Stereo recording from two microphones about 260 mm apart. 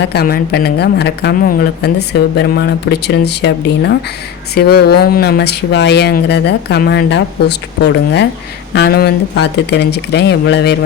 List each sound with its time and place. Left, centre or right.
0.0 s speech: left